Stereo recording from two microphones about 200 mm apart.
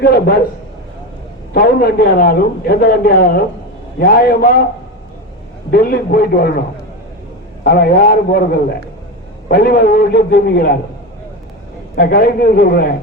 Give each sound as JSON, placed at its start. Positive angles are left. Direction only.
{"t": 0.0, "sound": "a man's voice", "side_deg": 50}
{"t": 1.5, "sound": "a man's voice", "side_deg": 50}
{"t": 5.7, "sound": "a man's voice", "side_deg": 45}
{"t": 7.6, "sound": "a man's voice", "side_deg": 50}
{"t": 9.5, "sound": "a man's voice", "side_deg": 50}
{"t": 11.9, "sound": "a man's voice", "side_deg": 50}